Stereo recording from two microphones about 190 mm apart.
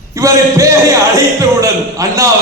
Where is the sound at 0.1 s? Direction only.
15° right (ahead or behind).